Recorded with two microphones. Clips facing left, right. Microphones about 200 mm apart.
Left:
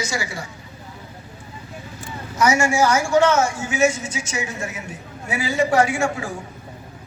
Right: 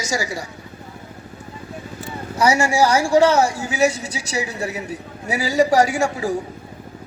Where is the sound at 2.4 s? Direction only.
35° right (ahead or behind).